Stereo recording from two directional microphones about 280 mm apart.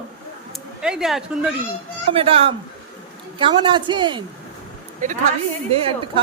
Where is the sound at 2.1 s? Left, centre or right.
Centre.